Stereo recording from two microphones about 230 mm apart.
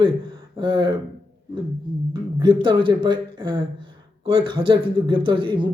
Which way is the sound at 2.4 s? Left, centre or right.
Right.